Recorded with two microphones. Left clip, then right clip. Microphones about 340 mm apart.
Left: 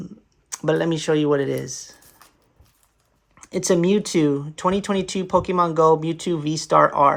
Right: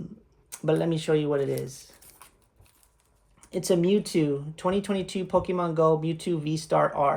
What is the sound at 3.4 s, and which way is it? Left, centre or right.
Speech, left.